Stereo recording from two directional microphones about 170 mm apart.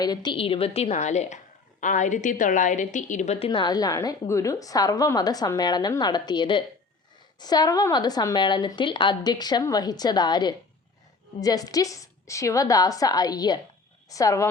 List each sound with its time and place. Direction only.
0.0 s a woman's voice: 25° left (ahead or behind); by 3.5 s 45° left (ahead or behind)
3.5 s a woman's voice: 25° left (ahead or behind)